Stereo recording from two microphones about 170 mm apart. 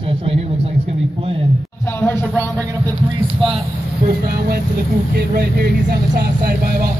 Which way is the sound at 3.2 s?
30° right (ahead or behind).